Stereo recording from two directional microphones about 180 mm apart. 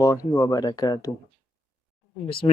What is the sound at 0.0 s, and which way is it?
Speech, 20° left (ahead or behind).